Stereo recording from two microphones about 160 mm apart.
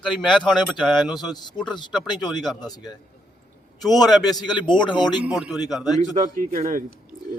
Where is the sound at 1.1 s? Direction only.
25° left (ahead or behind).